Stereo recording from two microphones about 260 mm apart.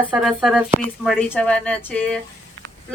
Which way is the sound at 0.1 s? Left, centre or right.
Centre.